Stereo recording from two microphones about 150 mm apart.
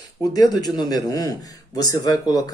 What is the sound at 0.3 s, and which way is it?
Speech, 25° left (ahead or behind).